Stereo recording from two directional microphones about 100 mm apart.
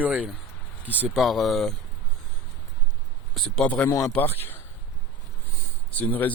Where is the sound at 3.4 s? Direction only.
5° left (ahead or behind).